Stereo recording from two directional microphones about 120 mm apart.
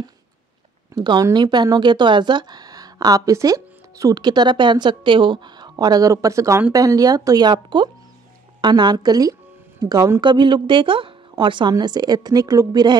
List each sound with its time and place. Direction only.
0.9 s speech: 35° right (ahead or behind)
10.2 s a woman's voice: 40° right (ahead or behind)